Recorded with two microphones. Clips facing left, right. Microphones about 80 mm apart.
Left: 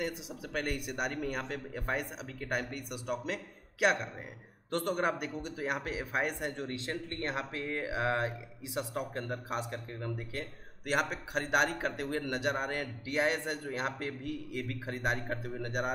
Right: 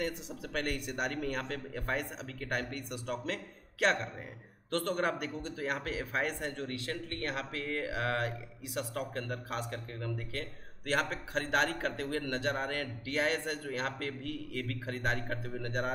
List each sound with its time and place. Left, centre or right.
0.0 s speech: centre